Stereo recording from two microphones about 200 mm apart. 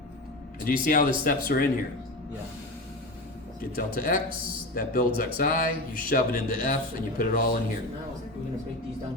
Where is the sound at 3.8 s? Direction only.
45° left (ahead or behind).